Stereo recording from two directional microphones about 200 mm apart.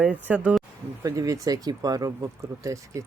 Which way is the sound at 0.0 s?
5° right (ahead or behind).